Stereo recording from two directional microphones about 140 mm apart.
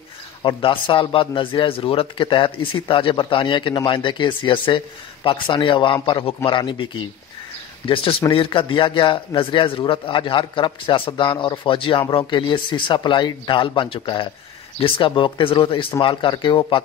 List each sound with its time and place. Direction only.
0.4 s a man's voice: 35° left (ahead or behind)